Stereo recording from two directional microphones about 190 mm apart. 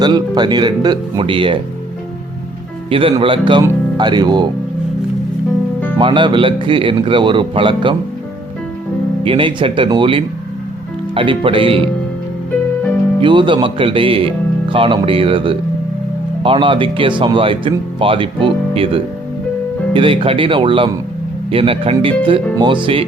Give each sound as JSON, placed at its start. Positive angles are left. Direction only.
{"t": 0.0, "sound": "speech", "side_deg": -25}
{"t": 2.9, "sound": "speech", "side_deg": -30}
{"t": 6.0, "sound": "speech", "side_deg": -25}
{"t": 9.2, "sound": "speech", "side_deg": -25}
{"t": 13.2, "sound": "speech", "side_deg": -25}